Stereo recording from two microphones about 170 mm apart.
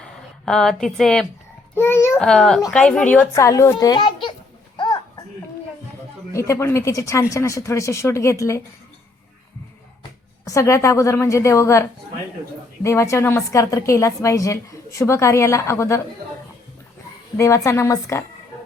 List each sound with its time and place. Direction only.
0.0 s speech: 5° left (ahead or behind)
1.7 s a woman's voice: 15° left (ahead or behind)
2.1 s a child's voice: centre (ahead or behind)
3.3 s a child's voice: 15° left (ahead or behind)
4.8 s a sound: 25° left (ahead or behind)
6.3 s a woman's voice: 15° left (ahead or behind)
10.4 s a woman's voice: 20° left (ahead or behind)
17.3 s a woman's voice: 20° left (ahead or behind)